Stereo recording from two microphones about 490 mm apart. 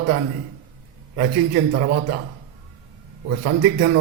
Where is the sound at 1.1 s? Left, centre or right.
Centre.